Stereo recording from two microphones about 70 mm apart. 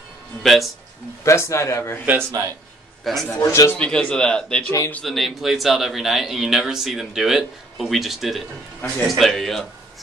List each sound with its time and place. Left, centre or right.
0.4 s speech: centre
1.2 s speech: left
3.0 s a man's voice: centre
3.3 s speech: left
3.7 s speech: centre
5.0 s speech: centre